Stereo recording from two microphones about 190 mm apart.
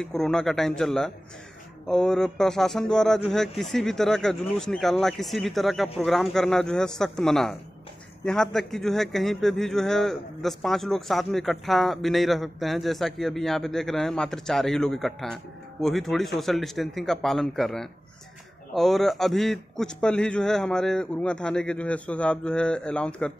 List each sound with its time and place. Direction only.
0.0 s a man's voice: 5° left (ahead or behind)